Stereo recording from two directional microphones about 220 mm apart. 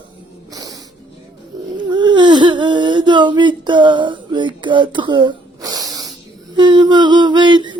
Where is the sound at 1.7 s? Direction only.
20° right (ahead or behind).